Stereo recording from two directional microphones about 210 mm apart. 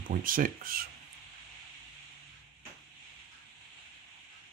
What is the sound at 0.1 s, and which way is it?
Speech, 40° right (ahead or behind).